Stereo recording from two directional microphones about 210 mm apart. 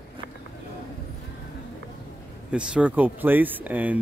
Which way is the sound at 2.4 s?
5° right (ahead or behind).